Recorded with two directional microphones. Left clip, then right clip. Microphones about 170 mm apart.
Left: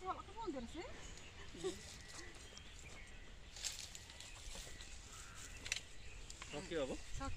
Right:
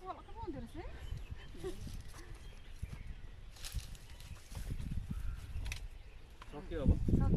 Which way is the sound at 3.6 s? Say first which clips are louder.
Left 3 dB; 65° right (ahead or behind).